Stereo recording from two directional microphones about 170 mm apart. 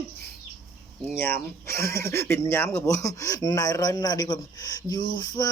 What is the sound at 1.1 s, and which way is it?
Speech, 15° left (ahead or behind).